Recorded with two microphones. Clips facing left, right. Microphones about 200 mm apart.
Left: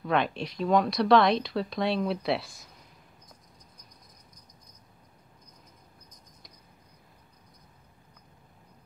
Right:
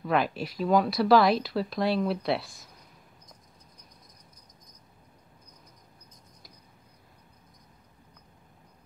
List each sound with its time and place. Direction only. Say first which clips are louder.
0.0 s speech: right 1 dB; 5° right (ahead or behind)